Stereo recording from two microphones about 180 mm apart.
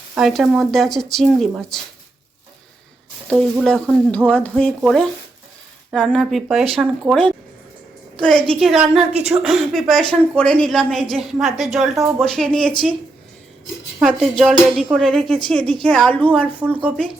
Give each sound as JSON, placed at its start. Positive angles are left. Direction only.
{"t": 0.1, "sound": "speech", "side_deg": 0}
{"t": 3.2, "sound": "speech", "side_deg": 0}
{"t": 9.1, "sound": "a woman's voice", "side_deg": -35}
{"t": 9.4, "sound": "speech", "side_deg": 0}
{"t": 14.2, "sound": "speech", "side_deg": 0}